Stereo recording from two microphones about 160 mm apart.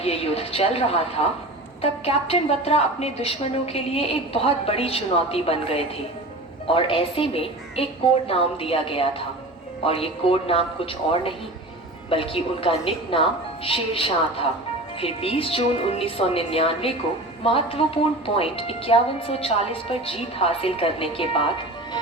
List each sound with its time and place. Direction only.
0.0 s a woman's voice: 40° left (ahead or behind)